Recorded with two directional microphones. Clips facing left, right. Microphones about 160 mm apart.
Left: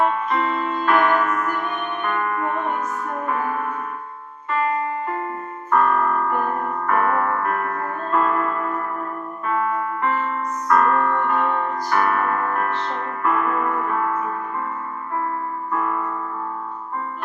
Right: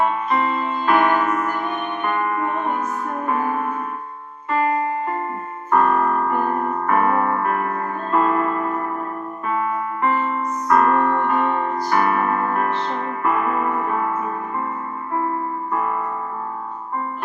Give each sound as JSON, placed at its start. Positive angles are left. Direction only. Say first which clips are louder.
{"t": 0.3, "sound": "music", "louder": "right 1 dB", "side_deg": -10}
{"t": 5.7, "sound": "music", "louder": "right 1 dB", "side_deg": -15}
{"t": 9.5, "sound": "piano", "louder": "left 1 dB", "side_deg": -15}
{"t": 15.7, "sound": "music", "louder": "even", "side_deg": -15}